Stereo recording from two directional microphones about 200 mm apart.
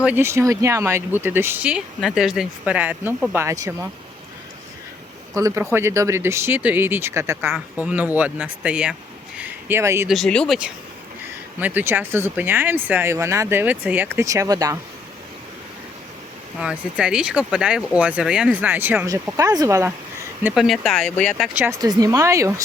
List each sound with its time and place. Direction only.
0.0 s speech: 10° right (ahead or behind)
5.3 s speech: 15° right (ahead or behind)
10.1 s speech: centre (ahead or behind)
11.6 s speech: 10° right (ahead or behind)
16.6 s speech: 5° right (ahead or behind)
20.4 s speech: centre (ahead or behind)
21.8 s speech: 20° right (ahead or behind)